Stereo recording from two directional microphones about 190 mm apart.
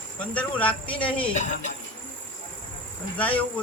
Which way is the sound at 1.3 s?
40° left (ahead or behind).